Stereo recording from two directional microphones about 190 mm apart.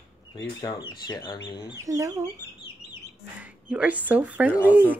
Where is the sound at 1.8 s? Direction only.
15° right (ahead or behind).